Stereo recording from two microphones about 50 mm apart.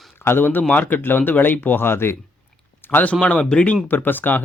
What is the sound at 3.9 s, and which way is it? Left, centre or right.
Speech, left.